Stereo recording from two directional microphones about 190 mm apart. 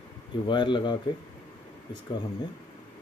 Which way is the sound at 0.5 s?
25° left (ahead or behind).